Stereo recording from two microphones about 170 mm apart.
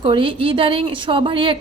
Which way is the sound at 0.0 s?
30° right (ahead or behind).